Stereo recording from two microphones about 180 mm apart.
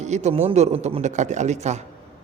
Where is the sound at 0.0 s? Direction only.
40° right (ahead or behind).